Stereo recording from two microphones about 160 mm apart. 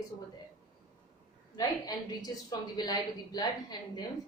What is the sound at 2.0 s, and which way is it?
A woman's voice, 25° left (ahead or behind).